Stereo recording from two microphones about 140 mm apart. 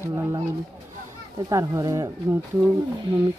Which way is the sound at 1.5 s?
25° right (ahead or behind).